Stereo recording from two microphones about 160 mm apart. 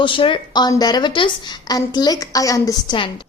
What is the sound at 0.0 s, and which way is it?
A woman's voice, 30° left (ahead or behind).